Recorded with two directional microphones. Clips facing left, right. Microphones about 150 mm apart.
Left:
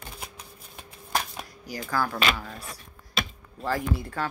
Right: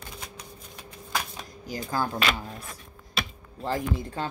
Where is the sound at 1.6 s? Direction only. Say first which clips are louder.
Even; 20° right (ahead or behind).